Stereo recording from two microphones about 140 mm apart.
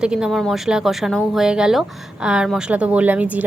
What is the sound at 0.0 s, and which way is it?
A woman's voice, 5° right (ahead or behind).